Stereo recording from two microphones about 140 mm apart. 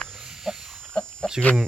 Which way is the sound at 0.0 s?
5° right (ahead or behind).